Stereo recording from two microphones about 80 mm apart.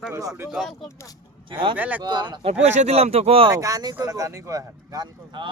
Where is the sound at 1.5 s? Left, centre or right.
Right.